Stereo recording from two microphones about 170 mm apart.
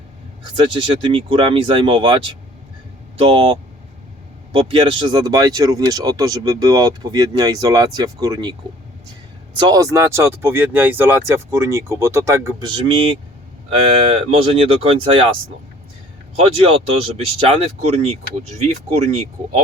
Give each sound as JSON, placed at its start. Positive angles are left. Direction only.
{"t": 0.5, "sound": "speech", "side_deg": -30}
{"t": 9.6, "sound": "speech", "side_deg": -20}
{"t": 12.6, "sound": "speech", "side_deg": -30}
{"t": 14.3, "sound": "speech", "side_deg": -35}
{"t": 16.4, "sound": "speech", "side_deg": -35}